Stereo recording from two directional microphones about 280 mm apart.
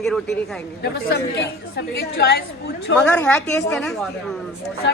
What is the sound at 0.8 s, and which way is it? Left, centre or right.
A woman's voice, left.